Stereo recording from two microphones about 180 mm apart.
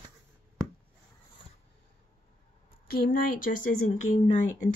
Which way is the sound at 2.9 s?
55° left (ahead or behind).